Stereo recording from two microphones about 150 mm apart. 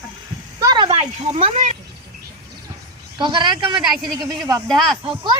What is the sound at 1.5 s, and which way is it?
Speech, 50° right (ahead or behind).